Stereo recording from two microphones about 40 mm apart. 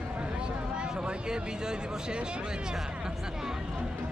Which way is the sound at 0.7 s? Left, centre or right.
Right.